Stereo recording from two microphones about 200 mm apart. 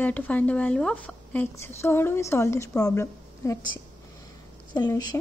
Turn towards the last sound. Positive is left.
turn(degrees=20)  # may be behind; listen again after turning